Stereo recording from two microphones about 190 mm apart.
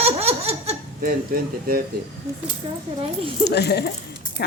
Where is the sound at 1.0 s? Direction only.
50° right (ahead or behind).